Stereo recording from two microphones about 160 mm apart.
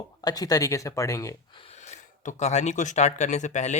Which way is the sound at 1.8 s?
45° left (ahead or behind).